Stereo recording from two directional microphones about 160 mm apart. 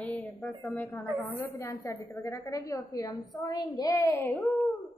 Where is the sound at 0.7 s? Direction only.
15° left (ahead or behind).